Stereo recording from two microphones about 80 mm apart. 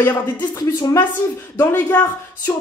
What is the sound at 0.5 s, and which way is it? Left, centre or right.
Speech, left.